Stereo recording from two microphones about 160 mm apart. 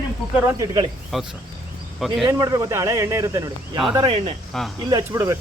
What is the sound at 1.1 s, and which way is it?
Speech, centre (ahead or behind).